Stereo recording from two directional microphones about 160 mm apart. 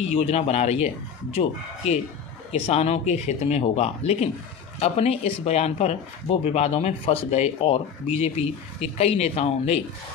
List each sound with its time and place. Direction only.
0.1 s speech: 40° left (ahead or behind)
2.5 s speech: 40° left (ahead or behind)